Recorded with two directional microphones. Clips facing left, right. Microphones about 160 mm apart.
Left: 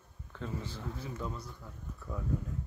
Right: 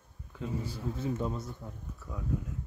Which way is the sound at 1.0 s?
25° right (ahead or behind).